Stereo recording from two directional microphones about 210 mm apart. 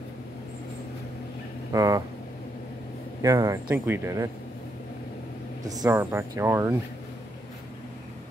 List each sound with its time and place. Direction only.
1.7 s speech: 15° right (ahead or behind)
3.2 s speech: 15° right (ahead or behind)
5.7 s speech: 15° right (ahead or behind)